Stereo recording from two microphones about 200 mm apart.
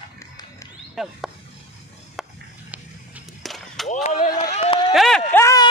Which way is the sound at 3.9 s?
35° left (ahead or behind).